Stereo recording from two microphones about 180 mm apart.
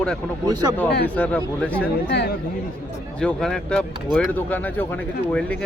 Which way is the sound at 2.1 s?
65° left (ahead or behind).